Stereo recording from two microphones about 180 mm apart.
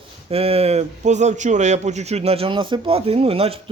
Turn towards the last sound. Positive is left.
turn(degrees=-30)  # may be behind; listen again after turning